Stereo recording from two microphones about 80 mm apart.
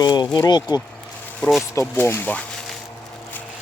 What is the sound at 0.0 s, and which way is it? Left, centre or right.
Speech, left.